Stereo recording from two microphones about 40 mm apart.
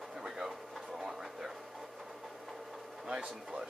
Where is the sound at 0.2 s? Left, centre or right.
Centre.